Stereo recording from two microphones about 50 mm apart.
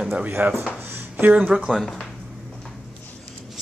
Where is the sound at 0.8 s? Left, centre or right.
Right.